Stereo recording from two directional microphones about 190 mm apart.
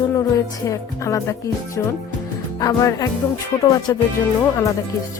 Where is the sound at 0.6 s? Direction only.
15° left (ahead or behind).